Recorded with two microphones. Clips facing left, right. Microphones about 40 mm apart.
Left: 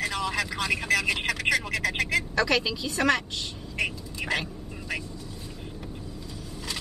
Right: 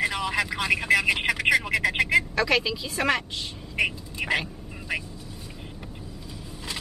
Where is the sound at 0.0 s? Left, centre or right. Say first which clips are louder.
Right 3 dB; centre.